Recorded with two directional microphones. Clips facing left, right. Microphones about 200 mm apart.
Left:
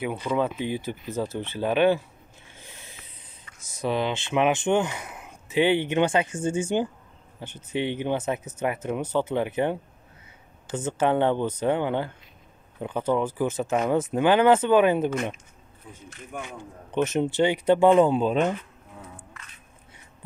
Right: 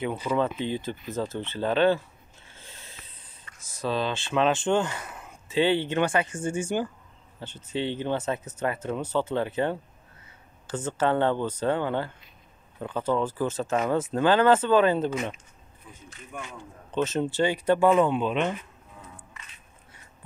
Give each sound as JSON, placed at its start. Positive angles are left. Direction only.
{"t": 0.4, "sound": "speech", "side_deg": 10}
{"t": 2.5, "sound": "snort", "side_deg": 15}
{"t": 3.8, "sound": "speech", "side_deg": 20}
{"t": 16.9, "sound": "speech", "side_deg": 15}
{"t": 17.8, "sound": "speech", "side_deg": 30}